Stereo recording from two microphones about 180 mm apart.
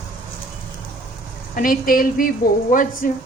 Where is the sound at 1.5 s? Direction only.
50° left (ahead or behind).